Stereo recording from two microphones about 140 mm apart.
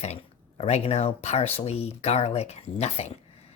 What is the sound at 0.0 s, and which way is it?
Speech, 50° left (ahead or behind).